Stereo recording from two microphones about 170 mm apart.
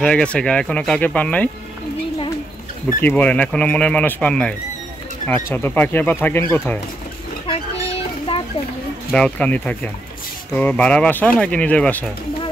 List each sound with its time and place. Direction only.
0.0 s speech: 5° left (ahead or behind)
3.0 s speech: 10° left (ahead or behind)
7.4 s chicken: 35° left (ahead or behind)
9.1 s speech: 5° left (ahead or behind)